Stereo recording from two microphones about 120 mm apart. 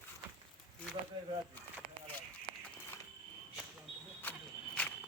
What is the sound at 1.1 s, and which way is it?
Speech, 45° right (ahead or behind).